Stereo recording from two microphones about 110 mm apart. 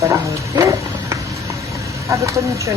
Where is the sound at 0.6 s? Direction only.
30° right (ahead or behind).